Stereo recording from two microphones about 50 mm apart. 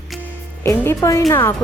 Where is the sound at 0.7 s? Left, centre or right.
Left.